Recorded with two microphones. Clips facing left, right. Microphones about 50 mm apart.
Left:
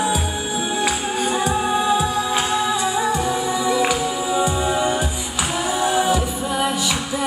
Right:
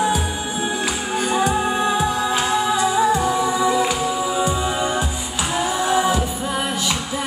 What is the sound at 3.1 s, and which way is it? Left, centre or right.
Music, right.